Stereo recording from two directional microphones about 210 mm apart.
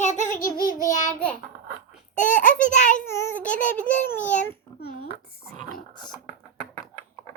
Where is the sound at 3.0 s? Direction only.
10° left (ahead or behind).